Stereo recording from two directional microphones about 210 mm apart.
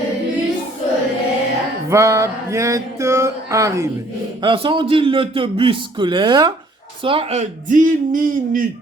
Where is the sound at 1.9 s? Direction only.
15° right (ahead or behind).